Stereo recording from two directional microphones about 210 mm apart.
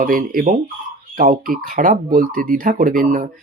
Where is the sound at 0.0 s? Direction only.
40° right (ahead or behind).